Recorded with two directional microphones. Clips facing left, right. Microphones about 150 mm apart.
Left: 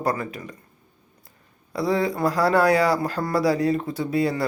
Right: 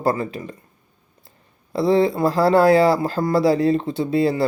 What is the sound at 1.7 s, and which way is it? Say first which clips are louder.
Speech: right 6 dB; 25° right (ahead or behind).